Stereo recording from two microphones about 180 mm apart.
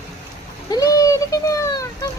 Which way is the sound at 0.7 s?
20° left (ahead or behind).